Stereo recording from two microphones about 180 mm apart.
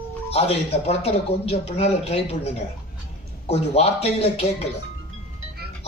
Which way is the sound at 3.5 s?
35° left (ahead or behind).